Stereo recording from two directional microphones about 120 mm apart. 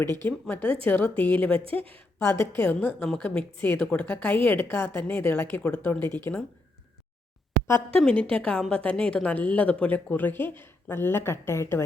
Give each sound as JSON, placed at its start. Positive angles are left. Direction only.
{"t": 0.3, "sound": "a woman's voice", "side_deg": 15}
{"t": 7.9, "sound": "speech", "side_deg": 5}